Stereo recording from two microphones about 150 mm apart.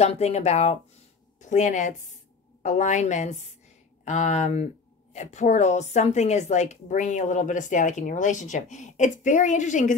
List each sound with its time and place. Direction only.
0.0 s a woman's voice: 45° left (ahead or behind)